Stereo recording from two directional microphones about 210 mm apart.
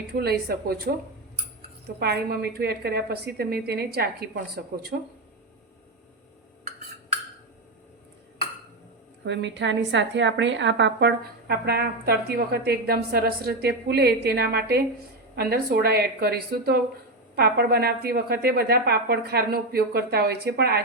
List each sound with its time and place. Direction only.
0.2 s a woman's voice: 50° right (ahead or behind)
2.0 s a woman's voice: 50° right (ahead or behind)
9.2 s a woman's voice: 55° right (ahead or behind)